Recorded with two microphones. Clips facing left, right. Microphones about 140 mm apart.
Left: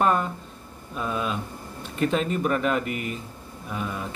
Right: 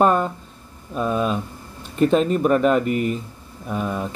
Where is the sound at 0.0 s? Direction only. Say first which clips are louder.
Right 5 dB; 40° right (ahead or behind).